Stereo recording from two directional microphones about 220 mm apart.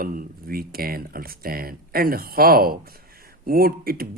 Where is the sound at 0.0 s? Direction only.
40° right (ahead or behind).